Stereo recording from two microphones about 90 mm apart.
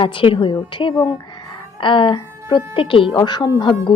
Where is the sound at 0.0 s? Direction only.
75° left (ahead or behind).